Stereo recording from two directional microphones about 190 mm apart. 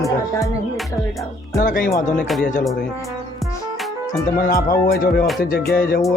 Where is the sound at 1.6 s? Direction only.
45° left (ahead or behind).